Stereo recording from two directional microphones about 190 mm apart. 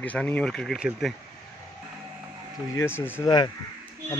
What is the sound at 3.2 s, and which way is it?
Speech, 20° left (ahead or behind).